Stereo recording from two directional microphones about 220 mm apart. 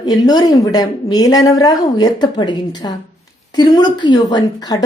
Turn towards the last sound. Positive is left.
turn(degrees=15)  # may be behind; listen again after turning